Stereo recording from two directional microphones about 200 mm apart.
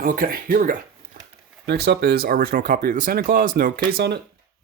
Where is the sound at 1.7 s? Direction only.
55° right (ahead or behind).